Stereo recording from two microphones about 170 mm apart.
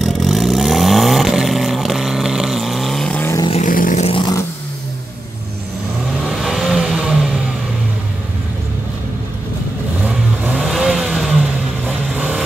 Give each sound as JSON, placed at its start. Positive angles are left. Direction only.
{"t": 0.0, "sound": "vehicle", "side_deg": 0}
{"t": 3.3, "sound": "vehicle", "side_deg": 30}
{"t": 3.6, "sound": "vehicle", "side_deg": 50}
{"t": 6.2, "sound": "vehicle", "side_deg": 0}
{"t": 10.0, "sound": "vehicle", "side_deg": -5}